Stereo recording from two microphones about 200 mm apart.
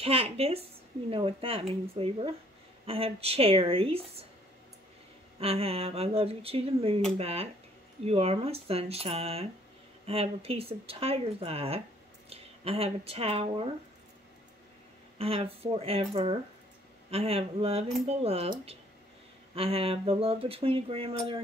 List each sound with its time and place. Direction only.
0.0 s speech: 30° right (ahead or behind)
5.4 s speech: 30° right (ahead or behind)
15.1 s speech: 30° right (ahead or behind)